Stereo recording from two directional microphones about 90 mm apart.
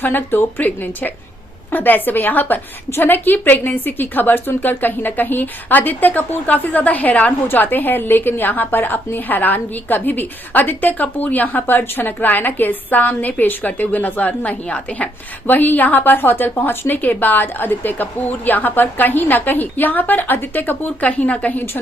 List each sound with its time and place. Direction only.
0.0 s a woman's voice: 20° left (ahead or behind)